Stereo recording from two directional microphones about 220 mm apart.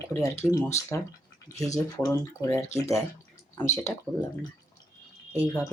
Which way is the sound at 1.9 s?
15° left (ahead or behind).